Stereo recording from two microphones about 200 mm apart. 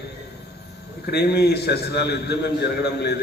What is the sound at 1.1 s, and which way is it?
A man's voice, 55° left (ahead or behind).